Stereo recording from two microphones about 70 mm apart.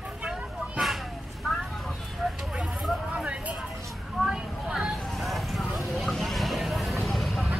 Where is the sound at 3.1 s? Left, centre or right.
Centre.